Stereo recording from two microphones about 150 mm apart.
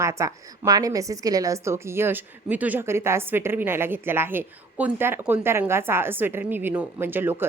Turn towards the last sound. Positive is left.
turn(degrees=-15)  # may be behind; listen again after turning